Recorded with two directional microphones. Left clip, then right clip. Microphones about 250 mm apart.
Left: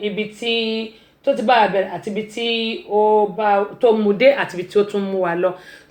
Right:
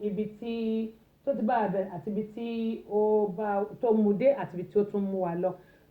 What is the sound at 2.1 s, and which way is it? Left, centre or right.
Speech, centre.